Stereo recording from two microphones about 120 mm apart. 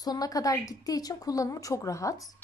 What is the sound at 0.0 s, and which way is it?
Speech, 30° left (ahead or behind).